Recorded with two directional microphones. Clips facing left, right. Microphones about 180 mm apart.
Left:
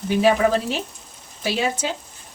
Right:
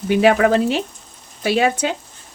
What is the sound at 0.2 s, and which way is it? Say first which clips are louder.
Speech: right 3 dB; 65° right (ahead or behind).